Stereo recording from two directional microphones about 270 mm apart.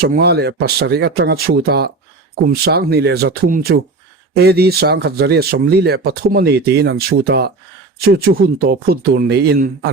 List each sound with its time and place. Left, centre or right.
0.0 s speech: right